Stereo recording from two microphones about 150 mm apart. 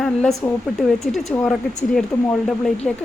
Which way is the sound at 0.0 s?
5° left (ahead or behind).